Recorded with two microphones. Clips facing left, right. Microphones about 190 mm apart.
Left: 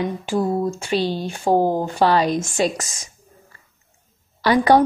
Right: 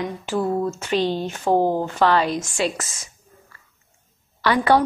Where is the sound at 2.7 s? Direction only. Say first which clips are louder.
Left 2 dB; 15° left (ahead or behind).